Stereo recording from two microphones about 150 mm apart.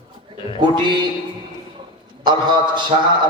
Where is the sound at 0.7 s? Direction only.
30° right (ahead or behind).